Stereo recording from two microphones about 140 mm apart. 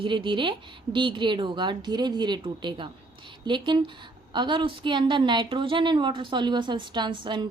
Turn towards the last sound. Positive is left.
turn(degrees=-35)  # may be behind; listen again after turning